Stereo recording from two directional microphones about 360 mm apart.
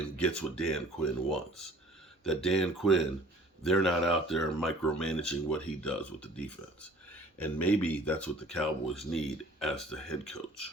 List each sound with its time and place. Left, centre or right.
0.2 s speech: centre